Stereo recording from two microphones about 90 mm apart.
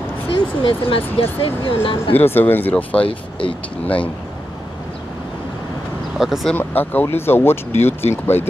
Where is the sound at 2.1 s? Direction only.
25° left (ahead or behind).